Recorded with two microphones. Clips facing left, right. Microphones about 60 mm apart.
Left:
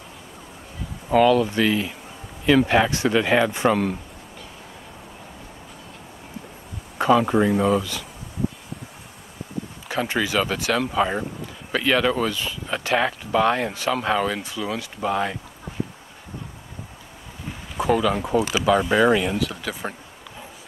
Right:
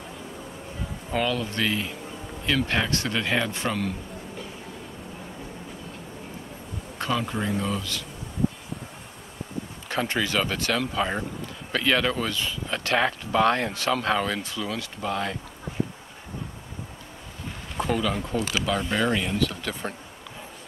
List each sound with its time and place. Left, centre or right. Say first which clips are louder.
1.1 s speech: left 10 dB; centre
2.4 s speech: left 8 dB; centre
7.0 s a sound: left 10 dB; left
7.4 s speech: left 8 dB; centre
9.8 s speech: left 2 dB; centre
17.5 s speech: left 6 dB; centre